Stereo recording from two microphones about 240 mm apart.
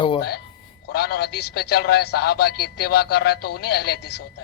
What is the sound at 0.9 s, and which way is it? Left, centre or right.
Speech, left.